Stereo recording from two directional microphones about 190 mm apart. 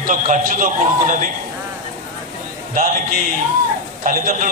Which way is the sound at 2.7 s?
50° right (ahead or behind).